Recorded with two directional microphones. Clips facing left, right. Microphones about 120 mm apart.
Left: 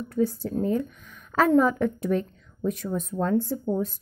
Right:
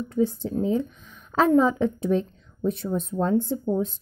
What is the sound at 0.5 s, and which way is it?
Speech, 5° right (ahead or behind).